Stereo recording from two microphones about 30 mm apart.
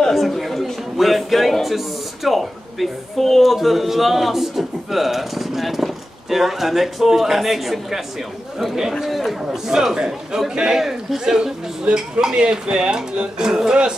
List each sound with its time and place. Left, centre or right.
0.1 s chatter: centre
0.9 s a man's voice: centre
9.0 s a man's voice: centre
9.4 s speech: right
10.8 s a man's voice: centre
11.9 s speech: right